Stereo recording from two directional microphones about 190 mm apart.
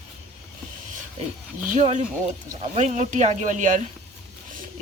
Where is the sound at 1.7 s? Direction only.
40° right (ahead or behind).